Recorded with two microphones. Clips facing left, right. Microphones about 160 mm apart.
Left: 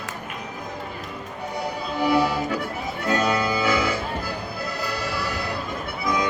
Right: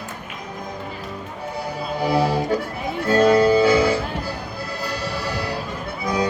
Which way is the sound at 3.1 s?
35° right (ahead or behind).